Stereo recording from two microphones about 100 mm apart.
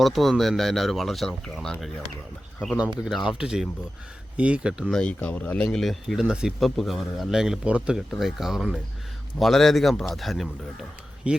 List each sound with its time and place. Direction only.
0.0 s speech: centre (ahead or behind)
3.0 s speech: 5° right (ahead or behind)
4.9 s speech: 10° left (ahead or behind)
11.3 s speech: 10° right (ahead or behind)